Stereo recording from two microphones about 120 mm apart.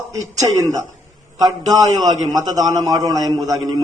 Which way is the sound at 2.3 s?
30° right (ahead or behind).